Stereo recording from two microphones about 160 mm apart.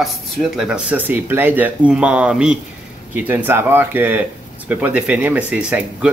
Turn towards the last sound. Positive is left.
turn(degrees=-5)  # may be behind; listen again after turning